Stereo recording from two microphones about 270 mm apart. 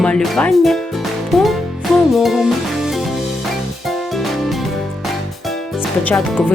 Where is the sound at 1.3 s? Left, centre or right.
Centre.